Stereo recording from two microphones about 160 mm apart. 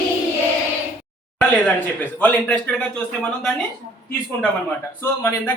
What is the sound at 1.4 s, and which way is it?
A man's voice, 10° left (ahead or behind).